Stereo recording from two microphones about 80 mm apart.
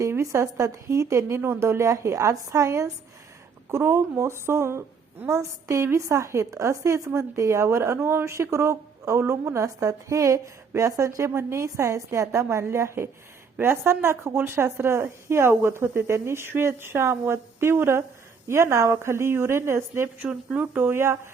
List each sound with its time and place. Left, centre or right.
0.0 s a woman's voice: right
20.2 s speech: centre
20.7 s speech: right